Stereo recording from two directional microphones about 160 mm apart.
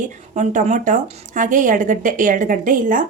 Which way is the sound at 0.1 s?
50° right (ahead or behind).